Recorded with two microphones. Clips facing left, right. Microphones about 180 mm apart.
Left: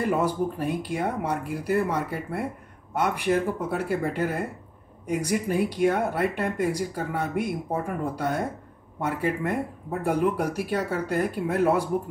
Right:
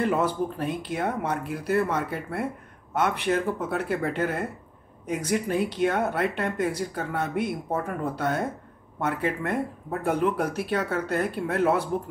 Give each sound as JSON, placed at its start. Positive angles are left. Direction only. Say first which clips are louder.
{"t": 0.0, "sound": "speech", "louder": "even", "side_deg": 10}